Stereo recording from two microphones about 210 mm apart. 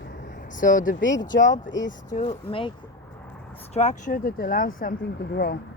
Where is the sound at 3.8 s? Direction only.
35° left (ahead or behind); by 5.5 s 50° left (ahead or behind).